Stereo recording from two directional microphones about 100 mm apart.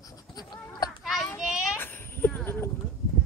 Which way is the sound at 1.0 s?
Centre (ahead or behind).